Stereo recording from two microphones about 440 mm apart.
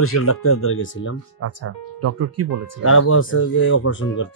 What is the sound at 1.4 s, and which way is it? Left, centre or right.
Speech, right.